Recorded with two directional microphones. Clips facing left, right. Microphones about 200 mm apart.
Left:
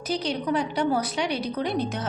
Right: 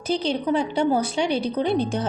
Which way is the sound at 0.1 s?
30° right (ahead or behind).